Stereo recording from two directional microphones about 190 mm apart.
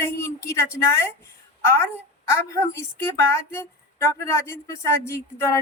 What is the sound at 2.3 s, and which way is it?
A woman's voice, 15° left (ahead or behind).